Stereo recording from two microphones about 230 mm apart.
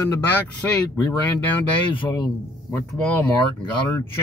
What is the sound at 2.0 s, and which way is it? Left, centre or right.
Speech, centre.